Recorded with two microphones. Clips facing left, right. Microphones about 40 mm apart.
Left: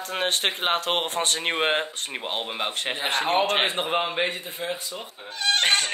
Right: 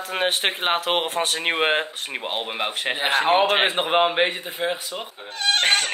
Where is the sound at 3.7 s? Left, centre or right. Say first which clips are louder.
Right 6 dB; right.